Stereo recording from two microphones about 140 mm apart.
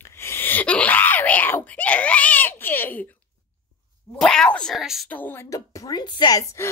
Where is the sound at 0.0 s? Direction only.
15° left (ahead or behind).